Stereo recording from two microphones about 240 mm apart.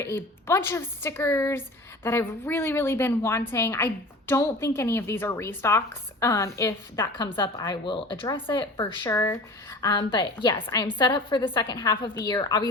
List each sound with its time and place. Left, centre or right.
0.0 s speech: centre